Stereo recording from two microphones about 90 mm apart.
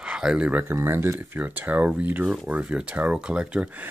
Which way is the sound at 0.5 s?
20° right (ahead or behind).